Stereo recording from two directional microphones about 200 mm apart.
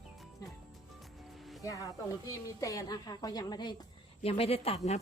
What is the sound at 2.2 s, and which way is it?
A woman's voice, 15° left (ahead or behind).